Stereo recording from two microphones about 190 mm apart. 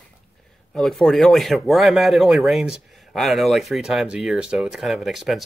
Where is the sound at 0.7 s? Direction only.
Centre (ahead or behind).